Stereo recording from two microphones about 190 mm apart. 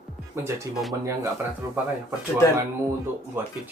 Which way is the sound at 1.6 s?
15° right (ahead or behind).